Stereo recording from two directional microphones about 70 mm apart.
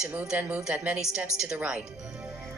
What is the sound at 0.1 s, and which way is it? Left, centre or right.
A woman's voice, right.